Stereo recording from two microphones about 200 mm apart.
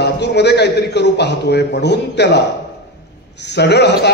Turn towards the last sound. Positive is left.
turn(degrees=55)  # may be behind; listen again after turning